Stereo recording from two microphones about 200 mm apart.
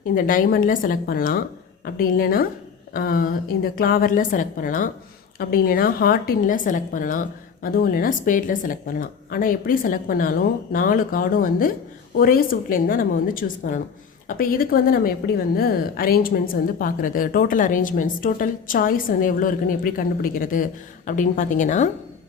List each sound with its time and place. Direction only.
0.1 s a woman's voice: 45° left (ahead or behind)